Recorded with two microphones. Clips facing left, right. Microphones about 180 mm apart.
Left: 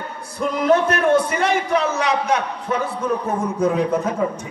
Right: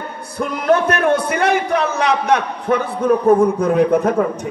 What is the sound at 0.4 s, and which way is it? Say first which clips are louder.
A man's voice: right 1 dB; 60° right (ahead or behind).